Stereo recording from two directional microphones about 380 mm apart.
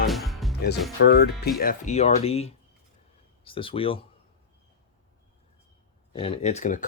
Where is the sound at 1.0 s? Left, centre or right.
Left.